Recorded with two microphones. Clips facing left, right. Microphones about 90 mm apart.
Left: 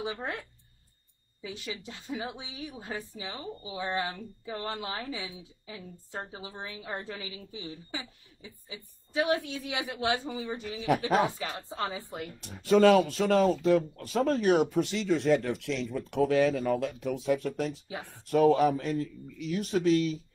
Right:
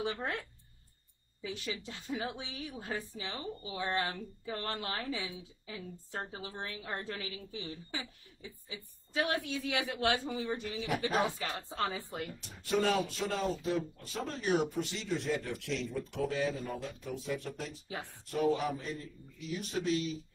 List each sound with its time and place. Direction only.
1.4 s a woman's voice: 15° left (ahead or behind)
12.4 s speech: 85° left; by 20.2 s 65° left (ahead or behind)